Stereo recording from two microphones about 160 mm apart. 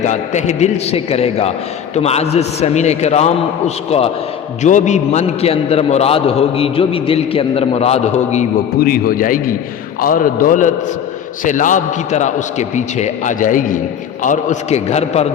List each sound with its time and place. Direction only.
0.0 s a man's voice: 45° left (ahead or behind)
4.6 s a man's voice: 45° left (ahead or behind)
8.8 s a man's voice: 65° left (ahead or behind); by 15.3 s 40° left (ahead or behind)